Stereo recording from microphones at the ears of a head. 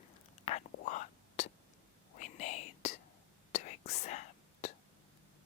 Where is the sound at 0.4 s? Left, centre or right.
Left.